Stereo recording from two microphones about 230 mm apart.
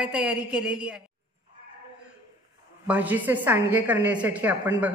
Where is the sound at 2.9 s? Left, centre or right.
Centre.